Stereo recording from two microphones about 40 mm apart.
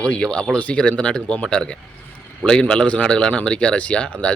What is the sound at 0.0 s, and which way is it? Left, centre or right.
A man's voice, left.